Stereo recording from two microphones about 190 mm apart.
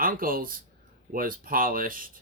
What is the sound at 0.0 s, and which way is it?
Speech, 50° right (ahead or behind).